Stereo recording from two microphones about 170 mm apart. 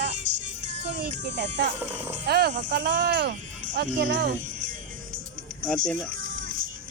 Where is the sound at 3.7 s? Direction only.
90° right.